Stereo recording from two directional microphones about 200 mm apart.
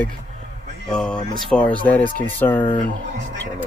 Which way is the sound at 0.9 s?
5° left (ahead or behind).